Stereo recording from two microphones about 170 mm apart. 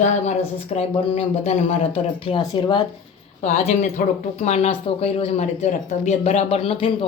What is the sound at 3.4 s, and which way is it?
Speech, 40° left (ahead or behind).